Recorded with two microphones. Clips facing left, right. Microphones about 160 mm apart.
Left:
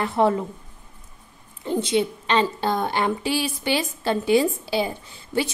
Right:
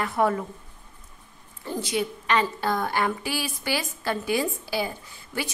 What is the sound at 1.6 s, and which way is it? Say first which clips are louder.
A woman's voice: left 6 dB; 20° left (ahead or behind).